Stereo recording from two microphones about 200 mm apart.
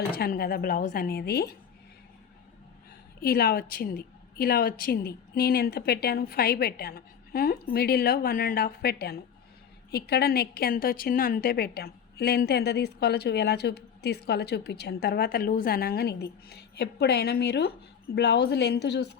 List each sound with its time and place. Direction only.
0.1 s a woman's voice: 50° left (ahead or behind)
3.2 s a woman's voice: 50° left (ahead or behind)